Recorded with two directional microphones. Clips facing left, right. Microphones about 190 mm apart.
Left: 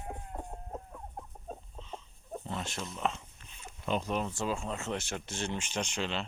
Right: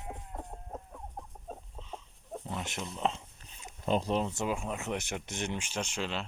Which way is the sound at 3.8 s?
35° right (ahead or behind).